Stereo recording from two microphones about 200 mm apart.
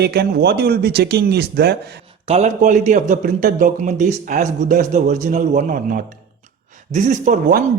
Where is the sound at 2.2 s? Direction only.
30° right (ahead or behind).